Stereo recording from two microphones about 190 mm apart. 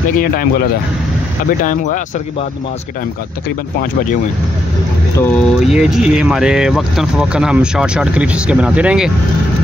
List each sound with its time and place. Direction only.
0.2 s speech: 50° left (ahead or behind)
5.1 s speech: 10° left (ahead or behind)
5.6 s speech: 5° right (ahead or behind)